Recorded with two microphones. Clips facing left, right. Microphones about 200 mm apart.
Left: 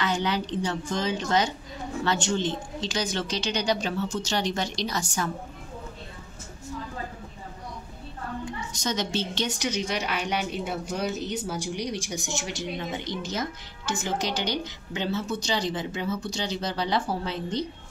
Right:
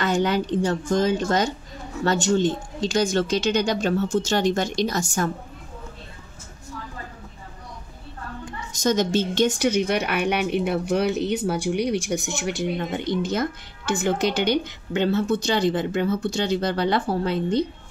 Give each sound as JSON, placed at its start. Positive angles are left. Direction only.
{"t": 0.0, "sound": "speech", "side_deg": -50}
{"t": 8.7, "sound": "a woman's voice", "side_deg": -45}